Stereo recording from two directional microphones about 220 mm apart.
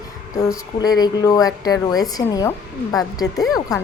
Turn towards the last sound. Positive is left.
turn(degrees=15)  # may be behind; listen again after turning